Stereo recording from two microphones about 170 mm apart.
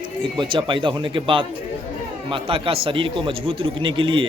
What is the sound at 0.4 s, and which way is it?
A man's voice, 30° right (ahead or behind).